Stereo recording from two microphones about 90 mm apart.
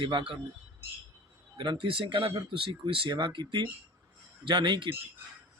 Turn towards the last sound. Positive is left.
turn(degrees=-65)  # may be behind; listen again after turning